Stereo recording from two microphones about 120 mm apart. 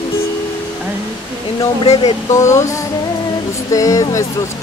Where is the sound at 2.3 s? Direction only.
25° left (ahead or behind).